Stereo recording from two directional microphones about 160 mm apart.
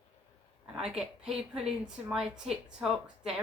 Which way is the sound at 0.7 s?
5° right (ahead or behind).